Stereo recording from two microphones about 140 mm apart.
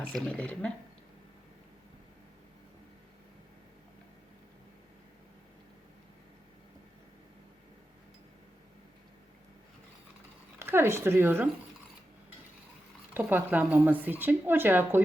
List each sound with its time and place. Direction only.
0.1 s speech: 5° left (ahead or behind)
10.6 s speech: 15° right (ahead or behind)
13.1 s speech: 15° right (ahead or behind)